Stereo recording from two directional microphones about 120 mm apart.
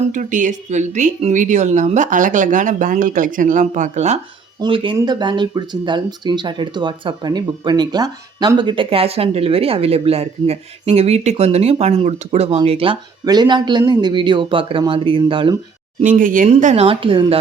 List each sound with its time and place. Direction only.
0.1 s speech: 90° right; by 4.2 s 75° right (ahead or behind)
4.6 s speech: 45° right (ahead or behind)
13.2 s a man's voice: 35° right (ahead or behind)
16.0 s speech: 90° right
16.8 s speech: 50° right (ahead or behind)